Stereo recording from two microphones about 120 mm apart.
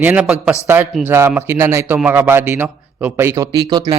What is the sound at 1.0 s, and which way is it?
Speech, 20° right (ahead or behind).